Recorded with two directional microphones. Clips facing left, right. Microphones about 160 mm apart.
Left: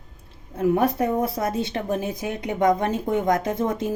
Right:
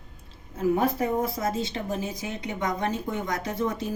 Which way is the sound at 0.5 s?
60° left (ahead or behind).